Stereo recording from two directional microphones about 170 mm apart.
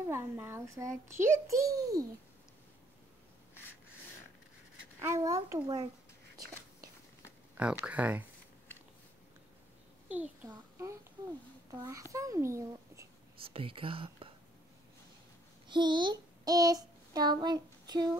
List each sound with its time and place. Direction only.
0.0 s a child's voice: 15° right (ahead or behind)
5.0 s a child's voice: 20° right (ahead or behind)
7.5 s a child's voice: 5° right (ahead or behind)
10.0 s a child's voice: 10° right (ahead or behind)
13.4 s speech: 30° right (ahead or behind)
15.7 s child singing: 25° right (ahead or behind)